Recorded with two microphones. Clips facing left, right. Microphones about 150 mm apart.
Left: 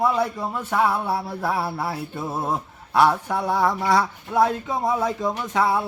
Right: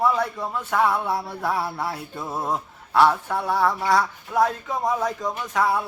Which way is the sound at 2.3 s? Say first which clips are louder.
Right 1 dB; 5° left (ahead or behind).